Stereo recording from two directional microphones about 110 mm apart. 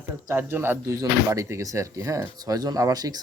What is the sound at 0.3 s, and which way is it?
Speech, 20° right (ahead or behind).